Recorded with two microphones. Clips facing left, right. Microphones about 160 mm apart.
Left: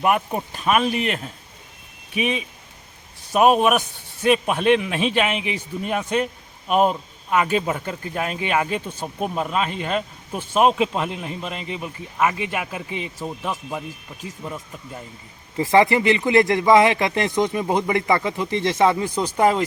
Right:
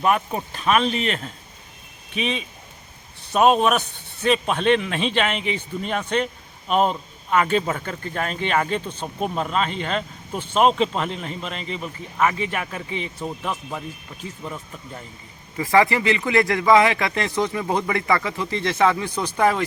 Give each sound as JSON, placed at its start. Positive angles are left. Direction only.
{"t": 0.0, "sound": "speech", "side_deg": 15}
{"t": 15.5, "sound": "a man's voice", "side_deg": 25}